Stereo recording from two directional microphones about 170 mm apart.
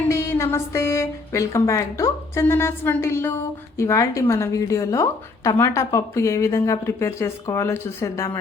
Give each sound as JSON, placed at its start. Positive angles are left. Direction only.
{"t": 0.1, "sound": "a woman's voice", "side_deg": 15}